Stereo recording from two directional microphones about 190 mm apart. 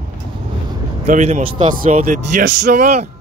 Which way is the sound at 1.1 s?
35° right (ahead or behind).